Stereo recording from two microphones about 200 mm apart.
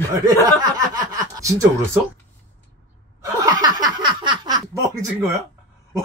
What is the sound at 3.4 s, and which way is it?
Snicker, 20° right (ahead or behind).